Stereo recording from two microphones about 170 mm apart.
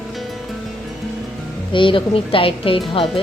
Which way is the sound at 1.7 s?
30° left (ahead or behind).